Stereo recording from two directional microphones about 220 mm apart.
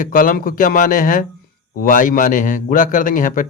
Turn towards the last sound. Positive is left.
turn(degrees=40)  # may be behind; listen again after turning